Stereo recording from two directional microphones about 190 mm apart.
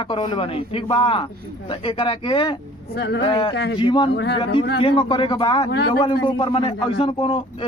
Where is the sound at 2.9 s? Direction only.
60° left (ahead or behind).